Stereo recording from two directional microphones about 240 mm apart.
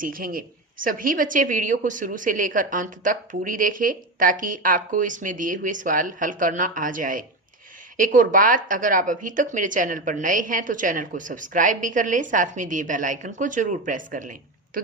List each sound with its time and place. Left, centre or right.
0.0 s a woman's voice: right